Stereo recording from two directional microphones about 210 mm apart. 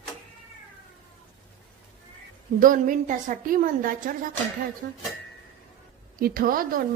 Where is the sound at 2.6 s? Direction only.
40° right (ahead or behind).